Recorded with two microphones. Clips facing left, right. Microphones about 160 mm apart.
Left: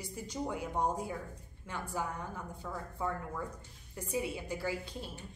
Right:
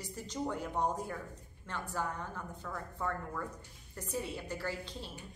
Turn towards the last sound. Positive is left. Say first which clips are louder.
# left 2 dB
turn(degrees=10)  # may be behind; listen again after turning